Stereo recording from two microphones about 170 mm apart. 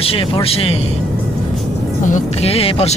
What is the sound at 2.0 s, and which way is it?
Speech, 45° left (ahead or behind).